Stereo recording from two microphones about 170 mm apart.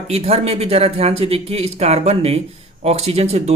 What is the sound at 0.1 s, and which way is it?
Speech, 35° right (ahead or behind).